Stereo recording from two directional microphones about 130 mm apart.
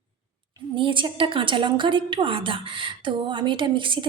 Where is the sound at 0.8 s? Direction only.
40° right (ahead or behind).